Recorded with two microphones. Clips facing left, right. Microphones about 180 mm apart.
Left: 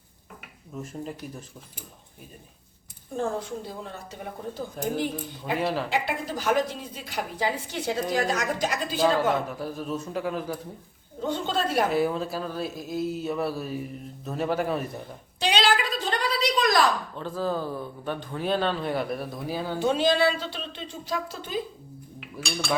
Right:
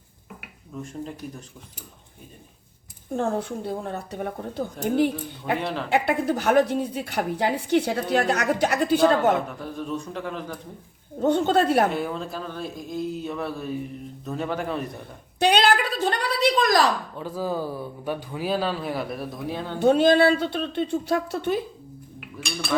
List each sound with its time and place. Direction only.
0.8 s speech: 5° left (ahead or behind)
3.2 s speech: 60° right (ahead or behind)
5.5 s speech: 5° left (ahead or behind)
5.9 s speech: 60° right (ahead or behind)
9.6 s speech: 5° left (ahead or behind)
11.2 s speech: 60° right (ahead or behind)
11.9 s speech: 5° left (ahead or behind)
15.4 s a sound: 60° right (ahead or behind)
17.2 s speech: 10° right (ahead or behind); by 19.8 s 5° left (ahead or behind)
19.8 s speech: 55° right (ahead or behind)